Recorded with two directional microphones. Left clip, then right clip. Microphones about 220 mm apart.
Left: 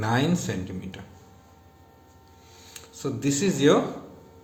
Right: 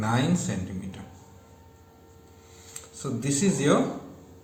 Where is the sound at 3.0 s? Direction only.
35° left (ahead or behind).